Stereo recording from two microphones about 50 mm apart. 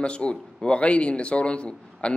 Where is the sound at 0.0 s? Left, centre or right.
Centre.